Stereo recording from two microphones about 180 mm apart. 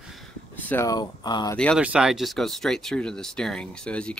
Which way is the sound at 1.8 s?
5° right (ahead or behind).